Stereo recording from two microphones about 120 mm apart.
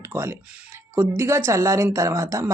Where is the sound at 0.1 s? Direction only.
20° right (ahead or behind).